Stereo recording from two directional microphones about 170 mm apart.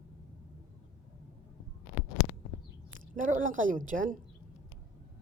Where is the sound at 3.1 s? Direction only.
50° right (ahead or behind).